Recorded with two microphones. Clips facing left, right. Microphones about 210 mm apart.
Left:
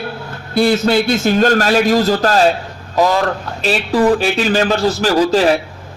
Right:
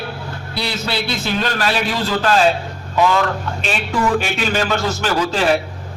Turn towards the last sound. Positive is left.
turn(degrees=40)  # may be behind; listen again after turning